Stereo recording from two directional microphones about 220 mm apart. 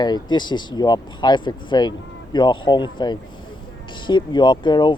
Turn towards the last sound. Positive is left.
turn(degrees=20)  # may be behind; listen again after turning